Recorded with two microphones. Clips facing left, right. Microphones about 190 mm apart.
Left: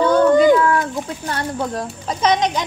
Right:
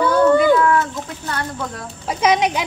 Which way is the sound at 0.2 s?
15° left (ahead or behind).